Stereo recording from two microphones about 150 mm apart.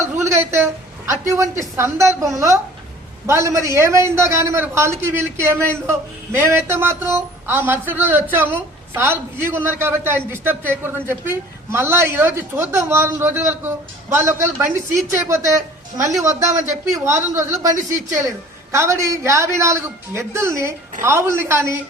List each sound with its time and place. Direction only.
0.2 s a sound: 15° right (ahead or behind)
1.4 s a woman's voice: 20° right (ahead or behind)
16.2 s a woman's voice: 20° right (ahead or behind)